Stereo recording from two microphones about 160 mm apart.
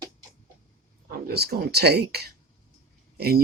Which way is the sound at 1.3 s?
80° right.